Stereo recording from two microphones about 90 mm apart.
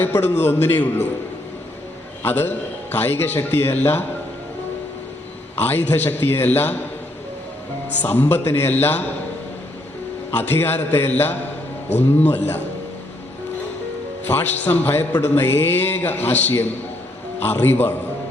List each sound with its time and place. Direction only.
0.0 s a man's voice: 20° left (ahead or behind)
2.2 s a man's voice: 25° left (ahead or behind)
5.5 s a man's voice: 20° left (ahead or behind)
8.0 s a man's voice: 25° left (ahead or behind)
10.3 s a man's voice: 20° left (ahead or behind)
14.3 s a man's voice: 20° left (ahead or behind)